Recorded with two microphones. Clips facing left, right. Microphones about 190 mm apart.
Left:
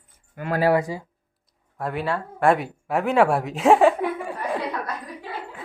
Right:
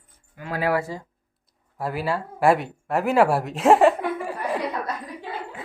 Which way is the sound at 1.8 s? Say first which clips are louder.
Even; 5° right (ahead or behind).